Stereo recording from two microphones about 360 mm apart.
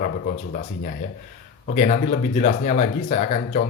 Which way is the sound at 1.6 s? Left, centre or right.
Centre.